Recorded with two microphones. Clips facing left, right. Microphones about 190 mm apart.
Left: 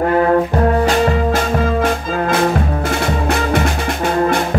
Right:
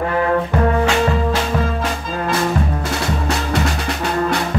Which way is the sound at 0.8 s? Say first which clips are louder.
Left 2 dB; 50° left (ahead or behind).